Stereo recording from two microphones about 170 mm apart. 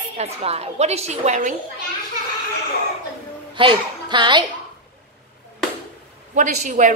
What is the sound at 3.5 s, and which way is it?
Speech, 30° right (ahead or behind).